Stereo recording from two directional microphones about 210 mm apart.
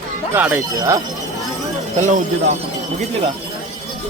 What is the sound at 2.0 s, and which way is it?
Speech, 35° right (ahead or behind).